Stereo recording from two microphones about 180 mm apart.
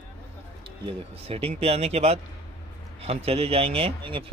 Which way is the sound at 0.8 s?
35° right (ahead or behind).